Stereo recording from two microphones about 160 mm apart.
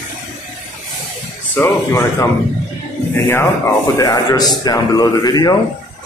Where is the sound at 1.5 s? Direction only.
20° left (ahead or behind).